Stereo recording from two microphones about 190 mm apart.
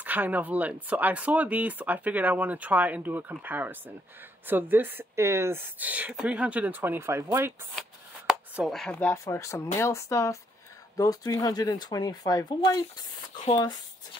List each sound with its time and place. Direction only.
0.0 s speech: 10° right (ahead or behind)
8.3 s chopping: centre (ahead or behind); by 9.6 s 15° left (ahead or behind)
9.8 s speech: 15° left (ahead or behind)